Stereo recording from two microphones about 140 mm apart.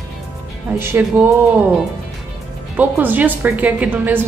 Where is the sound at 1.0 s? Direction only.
15° right (ahead or behind).